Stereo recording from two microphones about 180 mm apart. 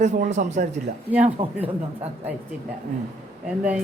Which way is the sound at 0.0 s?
40° right (ahead or behind).